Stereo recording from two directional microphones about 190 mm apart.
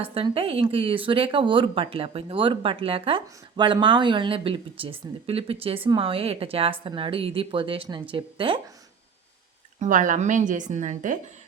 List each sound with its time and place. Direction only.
0.0 s a woman's voice: 30° right (ahead or behind)
9.8 s a woman's voice: 40° right (ahead or behind)